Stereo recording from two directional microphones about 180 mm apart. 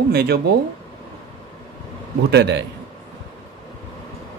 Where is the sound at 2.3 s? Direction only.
70° right (ahead or behind).